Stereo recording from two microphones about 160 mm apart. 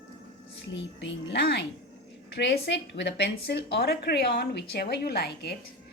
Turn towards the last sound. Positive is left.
turn(degrees=90)